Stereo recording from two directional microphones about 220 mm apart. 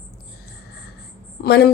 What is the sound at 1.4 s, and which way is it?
Speech, 50° left (ahead or behind).